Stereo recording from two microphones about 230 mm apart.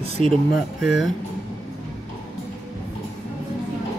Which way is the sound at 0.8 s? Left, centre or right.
Centre.